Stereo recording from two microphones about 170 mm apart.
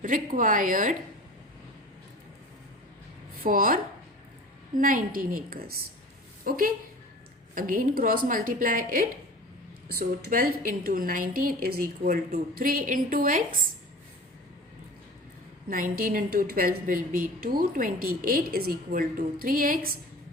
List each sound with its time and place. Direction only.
0.0 s a woman's voice: 55° right (ahead or behind)
3.4 s a woman's voice: 55° right (ahead or behind)
4.8 s a woman's voice: 55° right (ahead or behind)
15.7 s a woman's voice: 55° right (ahead or behind)